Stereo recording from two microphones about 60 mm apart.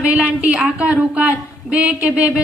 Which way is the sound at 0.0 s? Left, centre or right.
Centre.